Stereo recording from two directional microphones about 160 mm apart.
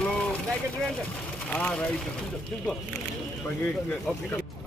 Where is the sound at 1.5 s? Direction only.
10° left (ahead or behind).